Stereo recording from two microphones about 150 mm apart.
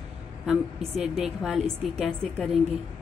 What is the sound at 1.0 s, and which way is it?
Speech, centre (ahead or behind).